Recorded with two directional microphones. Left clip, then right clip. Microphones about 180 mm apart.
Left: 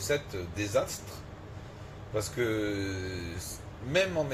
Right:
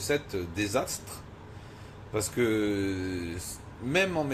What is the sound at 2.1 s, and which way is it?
Speech, 40° right (ahead or behind).